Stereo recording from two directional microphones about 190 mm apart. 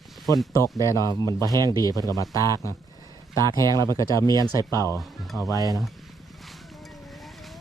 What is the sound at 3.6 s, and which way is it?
Speech, 20° right (ahead or behind).